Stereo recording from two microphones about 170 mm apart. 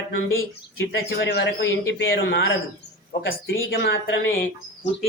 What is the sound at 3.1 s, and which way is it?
Speech, 70° left (ahead or behind).